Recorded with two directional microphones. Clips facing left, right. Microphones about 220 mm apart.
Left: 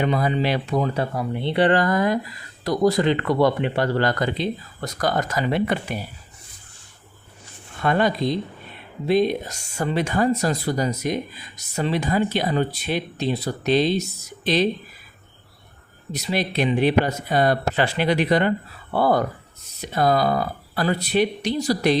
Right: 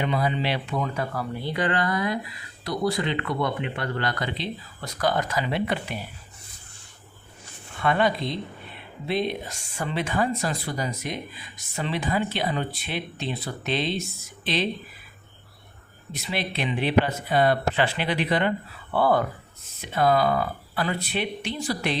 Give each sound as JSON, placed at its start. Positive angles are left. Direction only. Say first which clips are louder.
{"t": 0.0, "sound": "speech", "louder": "left 4 dB", "side_deg": 45}
{"t": 1.1, "sound": "speech", "louder": "left 6 dB", "side_deg": 25}
{"t": 7.8, "sound": "speech", "louder": "left 3 dB", "side_deg": 40}
{"t": 16.1, "sound": "speech", "louder": "left 6 dB", "side_deg": 40}